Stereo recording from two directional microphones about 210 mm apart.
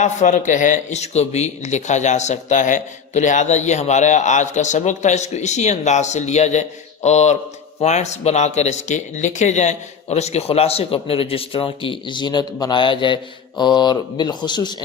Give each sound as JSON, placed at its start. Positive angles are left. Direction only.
{"t": 0.0, "sound": "a man's voice", "side_deg": 35}